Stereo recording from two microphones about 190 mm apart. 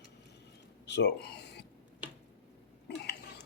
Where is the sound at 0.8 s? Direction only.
65° left (ahead or behind).